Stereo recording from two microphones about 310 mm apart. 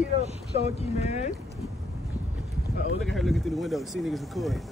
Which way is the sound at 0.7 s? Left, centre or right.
Left.